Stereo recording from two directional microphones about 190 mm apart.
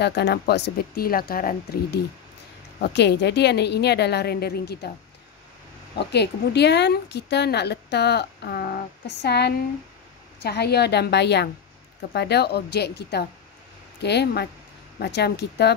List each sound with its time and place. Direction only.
0.0 s speech: 60° left (ahead or behind)
5.9 s speech: 60° left (ahead or behind)